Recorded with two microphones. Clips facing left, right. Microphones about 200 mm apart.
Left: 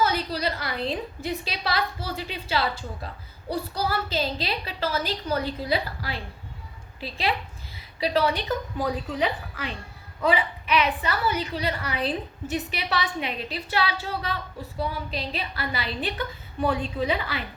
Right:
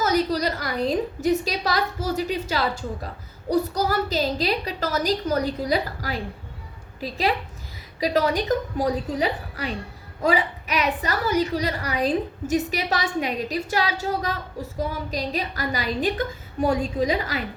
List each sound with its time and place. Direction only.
0.0 s a woman's voice: 40° right (ahead or behind)